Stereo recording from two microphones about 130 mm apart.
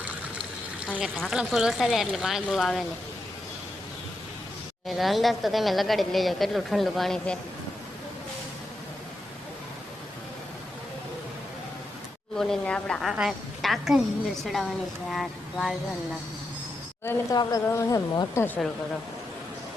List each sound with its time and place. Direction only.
0.0 s a sound: 10° right (ahead or behind)
1.1 s speech: 5° left (ahead or behind)
4.9 s speech: centre (ahead or behind)
12.4 s speech: 5° left (ahead or behind)
17.3 s a woman's voice: 25° left (ahead or behind)